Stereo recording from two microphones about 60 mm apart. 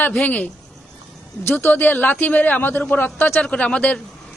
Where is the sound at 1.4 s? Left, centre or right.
Left.